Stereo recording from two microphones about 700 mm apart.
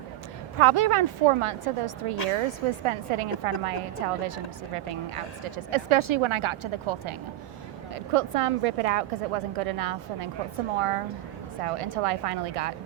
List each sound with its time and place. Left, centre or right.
0.6 s a woman's voice: right
2.1 s speech: left
2.8 s a woman's voice: right